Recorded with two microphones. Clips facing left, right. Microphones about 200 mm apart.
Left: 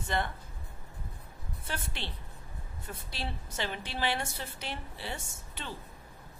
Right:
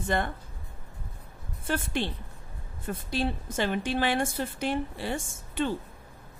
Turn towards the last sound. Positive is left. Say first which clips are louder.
# right 13 dB
turn(degrees=-50)  # may be behind; listen again after turning